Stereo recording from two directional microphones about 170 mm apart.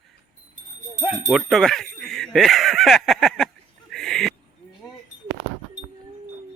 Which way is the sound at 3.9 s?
Centre (ahead or behind).